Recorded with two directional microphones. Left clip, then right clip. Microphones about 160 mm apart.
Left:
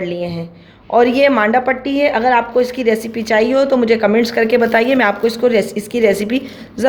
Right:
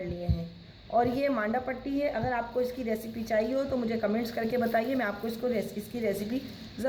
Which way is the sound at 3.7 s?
65° left (ahead or behind).